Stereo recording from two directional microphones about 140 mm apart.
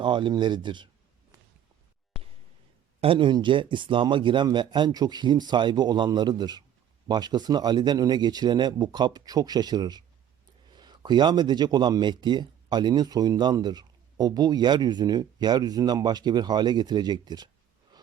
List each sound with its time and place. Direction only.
0.0 s a man's voice: 35° right (ahead or behind)
3.0 s a man's voice: 40° right (ahead or behind)